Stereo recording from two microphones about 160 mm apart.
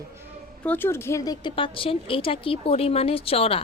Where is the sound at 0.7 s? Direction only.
15° left (ahead or behind).